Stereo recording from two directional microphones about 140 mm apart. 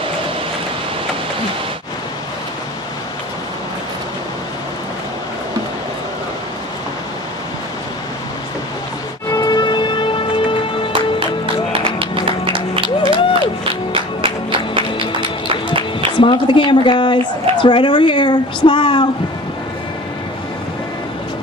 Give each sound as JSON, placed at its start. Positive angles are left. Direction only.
{"t": 9.3, "sound": "siren", "side_deg": 30}
{"t": 11.8, "sound": "music", "side_deg": -40}
{"t": 12.7, "sound": "music", "side_deg": 35}
{"t": 13.9, "sound": "music", "side_deg": -40}
{"t": 16.2, "sound": "a woman's voice", "side_deg": 35}